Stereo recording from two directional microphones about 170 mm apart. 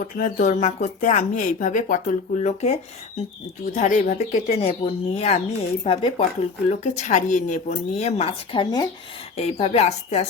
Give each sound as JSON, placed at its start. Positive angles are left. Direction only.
{"t": 0.2, "sound": "speech", "side_deg": 45}